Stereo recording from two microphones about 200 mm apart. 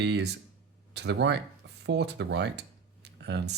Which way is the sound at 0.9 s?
55° right (ahead or behind).